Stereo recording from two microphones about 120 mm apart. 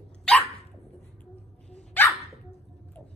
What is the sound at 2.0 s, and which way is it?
Dog, 15° left (ahead or behind).